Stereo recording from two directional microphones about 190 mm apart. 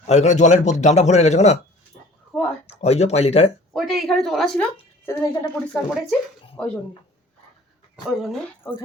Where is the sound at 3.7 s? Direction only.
Centre (ahead or behind).